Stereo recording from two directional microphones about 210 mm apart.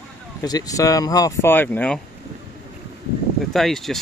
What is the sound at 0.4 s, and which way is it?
Speech, 15° left (ahead or behind).